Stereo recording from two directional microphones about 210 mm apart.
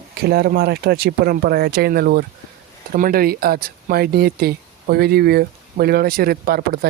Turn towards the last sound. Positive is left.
turn(degrees=-45)  # may be behind; listen again after turning